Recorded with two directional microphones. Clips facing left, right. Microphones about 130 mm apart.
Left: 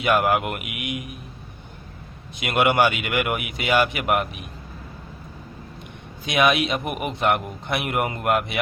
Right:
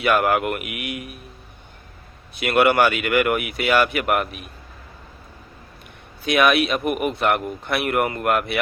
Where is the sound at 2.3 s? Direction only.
20° left (ahead or behind).